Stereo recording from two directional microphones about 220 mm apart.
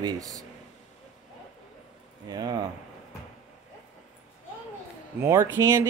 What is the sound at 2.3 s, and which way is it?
Speech, 20° right (ahead or behind).